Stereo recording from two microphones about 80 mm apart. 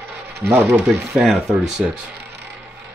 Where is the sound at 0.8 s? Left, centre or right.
Centre.